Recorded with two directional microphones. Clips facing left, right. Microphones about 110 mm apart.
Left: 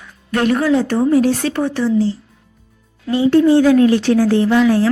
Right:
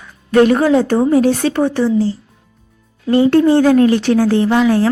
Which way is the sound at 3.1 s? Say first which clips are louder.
Right 1 dB; 55° right (ahead or behind).